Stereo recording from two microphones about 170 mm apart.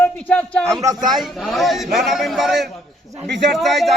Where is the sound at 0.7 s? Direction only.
20° right (ahead or behind).